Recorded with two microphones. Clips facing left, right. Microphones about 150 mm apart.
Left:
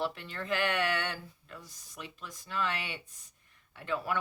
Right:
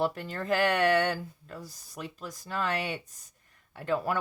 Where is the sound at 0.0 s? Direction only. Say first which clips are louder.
Right 5 dB; 40° right (ahead or behind).